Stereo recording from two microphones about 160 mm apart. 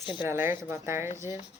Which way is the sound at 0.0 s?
30° left (ahead or behind).